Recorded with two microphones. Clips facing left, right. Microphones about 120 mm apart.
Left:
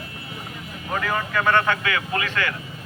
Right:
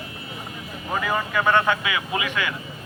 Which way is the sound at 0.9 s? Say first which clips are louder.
Even; 10° right (ahead or behind).